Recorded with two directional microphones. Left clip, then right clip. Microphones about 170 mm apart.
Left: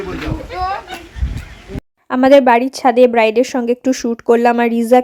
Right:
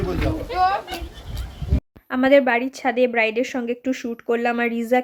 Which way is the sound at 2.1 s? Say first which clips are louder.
Left 7 dB; 35° left (ahead or behind).